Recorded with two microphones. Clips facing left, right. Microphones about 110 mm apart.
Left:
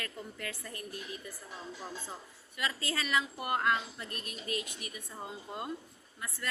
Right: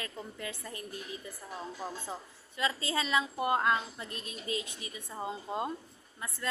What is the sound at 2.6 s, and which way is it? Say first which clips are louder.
A woman's voice: right 4 dB; 20° right (ahead or behind).